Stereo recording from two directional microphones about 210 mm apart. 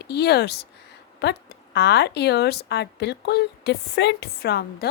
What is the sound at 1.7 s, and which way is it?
Speech, 55° left (ahead or behind).